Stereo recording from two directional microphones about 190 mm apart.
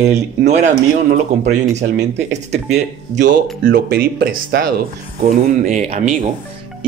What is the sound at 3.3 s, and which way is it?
Speech, 50° right (ahead or behind).